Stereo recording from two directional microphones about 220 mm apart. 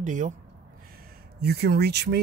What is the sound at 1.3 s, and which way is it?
Speech, 45° right (ahead or behind).